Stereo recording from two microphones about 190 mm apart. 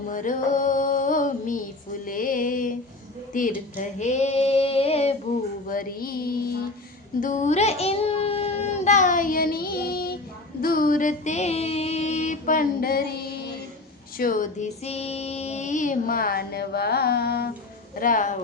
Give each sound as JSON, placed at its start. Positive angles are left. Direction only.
{"t": 0.1, "sound": "music", "side_deg": 45}
{"t": 3.3, "sound": "female singing", "side_deg": 45}
{"t": 5.6, "sound": "child singing", "side_deg": 45}
{"t": 7.2, "sound": "child singing", "side_deg": 40}
{"t": 10.6, "sound": "female singing", "side_deg": 50}
{"t": 17.9, "sound": "speech", "side_deg": 45}